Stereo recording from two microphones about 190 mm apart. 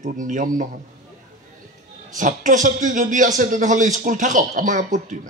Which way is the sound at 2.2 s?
40° right (ahead or behind).